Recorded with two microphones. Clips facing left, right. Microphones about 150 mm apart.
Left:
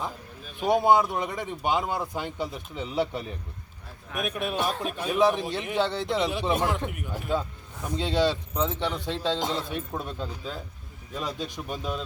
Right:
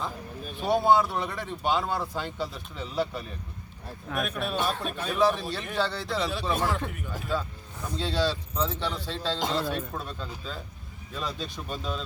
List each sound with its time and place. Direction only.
0.5 s a man's voice: 15° left (ahead or behind)